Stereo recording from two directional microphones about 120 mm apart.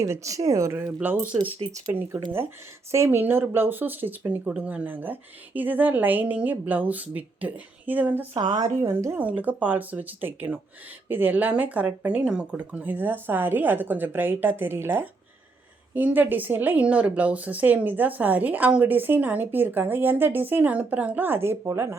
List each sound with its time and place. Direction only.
0.0 s speech: 25° right (ahead or behind)
0.9 s speech: 5° right (ahead or behind)
8.4 s speech: 35° right (ahead or behind)